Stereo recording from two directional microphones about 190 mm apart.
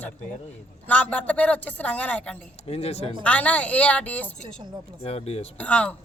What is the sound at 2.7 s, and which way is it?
Speech, 35° left (ahead or behind).